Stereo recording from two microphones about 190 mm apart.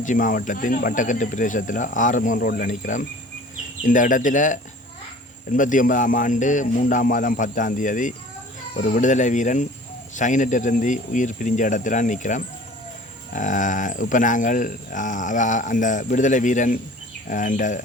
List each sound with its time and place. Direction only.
0.0 s speech: 45° left (ahead or behind)